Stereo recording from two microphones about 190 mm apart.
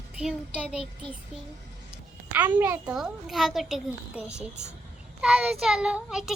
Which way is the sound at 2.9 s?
Centre (ahead or behind).